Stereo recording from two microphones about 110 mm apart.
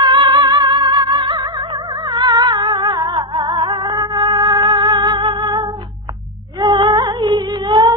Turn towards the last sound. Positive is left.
turn(degrees=-40)  # may be behind; listen again after turning